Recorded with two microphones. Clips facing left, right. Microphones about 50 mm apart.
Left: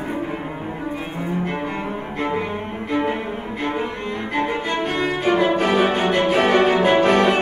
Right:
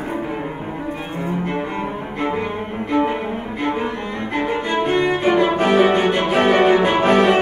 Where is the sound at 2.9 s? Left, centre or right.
Centre.